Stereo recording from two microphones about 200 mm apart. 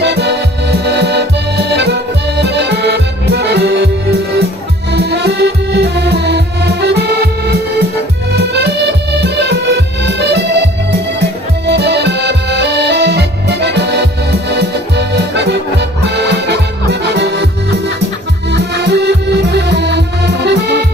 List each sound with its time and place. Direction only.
0.0 s accordion: 55° right (ahead or behind)
4.9 s music: 55° right (ahead or behind)
8.3 s accordion: 55° right (ahead or behind)
11.6 s music: 55° right (ahead or behind)
18.5 s music: 55° right (ahead or behind)